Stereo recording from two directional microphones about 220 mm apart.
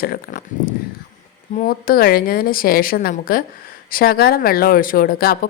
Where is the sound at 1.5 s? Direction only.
40° left (ahead or behind).